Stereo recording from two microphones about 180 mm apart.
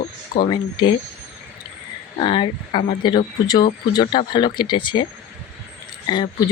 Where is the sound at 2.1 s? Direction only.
30° left (ahead or behind).